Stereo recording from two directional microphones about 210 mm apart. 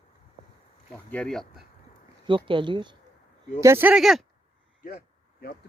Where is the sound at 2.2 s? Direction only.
25° right (ahead or behind).